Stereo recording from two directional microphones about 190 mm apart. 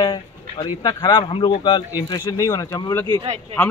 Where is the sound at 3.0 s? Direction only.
30° right (ahead or behind).